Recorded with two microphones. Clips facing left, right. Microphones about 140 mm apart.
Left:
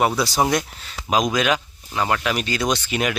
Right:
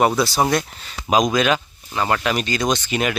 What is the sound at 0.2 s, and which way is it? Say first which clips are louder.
Speech: right 1 dB; 15° left (ahead or behind).